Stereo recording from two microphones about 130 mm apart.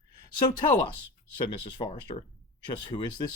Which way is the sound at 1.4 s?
35° left (ahead or behind).